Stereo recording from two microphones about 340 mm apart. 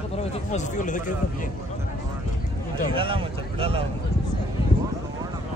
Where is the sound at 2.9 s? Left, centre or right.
Centre.